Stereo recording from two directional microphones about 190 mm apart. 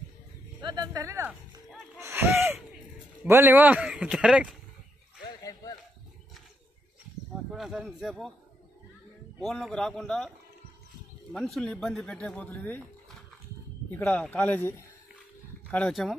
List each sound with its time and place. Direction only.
0.6 s a sound: 20° right (ahead or behind)
3.3 s a man's voice: 10° right (ahead or behind)
5.4 s a sound: 20° left (ahead or behind)
7.5 s speech: centre (ahead or behind)
9.4 s speech: centre (ahead or behind)
11.3 s speech: centre (ahead or behind)
13.9 s speech: 5° left (ahead or behind)